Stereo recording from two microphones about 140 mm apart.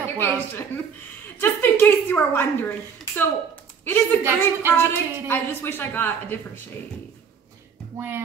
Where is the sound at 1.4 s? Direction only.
15° left (ahead or behind).